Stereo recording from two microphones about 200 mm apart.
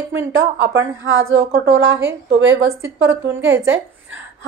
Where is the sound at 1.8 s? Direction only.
15° right (ahead or behind).